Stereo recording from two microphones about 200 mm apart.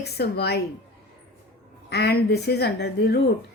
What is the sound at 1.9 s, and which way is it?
A woman's voice, 55° left (ahead or behind).